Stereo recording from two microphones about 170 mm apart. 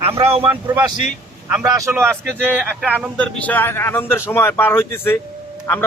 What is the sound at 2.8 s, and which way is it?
Speech, 5° right (ahead or behind).